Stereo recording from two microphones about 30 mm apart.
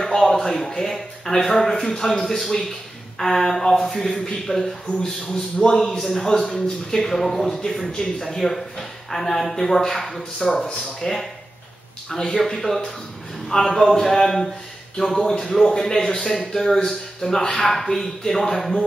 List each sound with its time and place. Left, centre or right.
0.0 s a man's voice: centre
4.5 s a man's voice: left; by 10.6 s centre
11.0 s a man's voice: centre
15.2 s a man's voice: centre
16.0 s a man's voice: left